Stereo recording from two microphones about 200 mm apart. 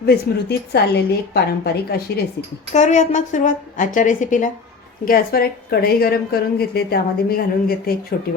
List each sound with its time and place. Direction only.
0.0 s a woman's voice: 50° left (ahead or behind)
2.7 s a woman's voice: 35° left (ahead or behind)